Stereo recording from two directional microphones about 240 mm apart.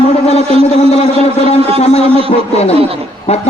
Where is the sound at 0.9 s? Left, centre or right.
Left.